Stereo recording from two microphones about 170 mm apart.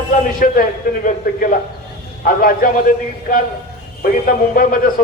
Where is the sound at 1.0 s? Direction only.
50° left (ahead or behind).